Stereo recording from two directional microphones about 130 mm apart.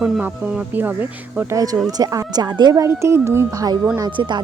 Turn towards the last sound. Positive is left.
turn(degrees=-35)  # may be behind; listen again after turning